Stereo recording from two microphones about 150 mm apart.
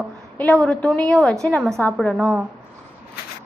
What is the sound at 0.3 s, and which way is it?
A woman's voice, 10° left (ahead or behind).